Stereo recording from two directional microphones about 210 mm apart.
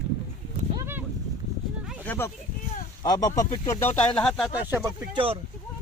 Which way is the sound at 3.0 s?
15° left (ahead or behind).